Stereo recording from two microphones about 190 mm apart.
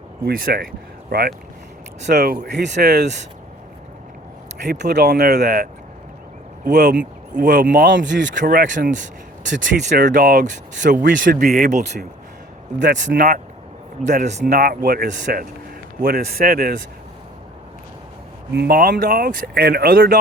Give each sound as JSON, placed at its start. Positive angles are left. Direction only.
{"t": 0.3, "sound": "speech", "side_deg": -50}
{"t": 2.0, "sound": "speech", "side_deg": -55}
{"t": 4.6, "sound": "speech", "side_deg": -60}
{"t": 6.7, "sound": "speech", "side_deg": -55}
{"t": 7.9, "sound": "speech", "side_deg": -70}
{"t": 8.4, "sound": "speech", "side_deg": -45}
{"t": 12.8, "sound": "speech", "side_deg": -70}
{"t": 13.1, "sound": "speech", "side_deg": -40}
{"t": 14.5, "sound": "speech", "side_deg": -55}
{"t": 18.5, "sound": "speech", "side_deg": -55}